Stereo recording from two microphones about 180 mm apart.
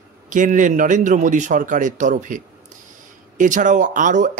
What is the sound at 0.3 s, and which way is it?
A man's voice, 45° right (ahead or behind).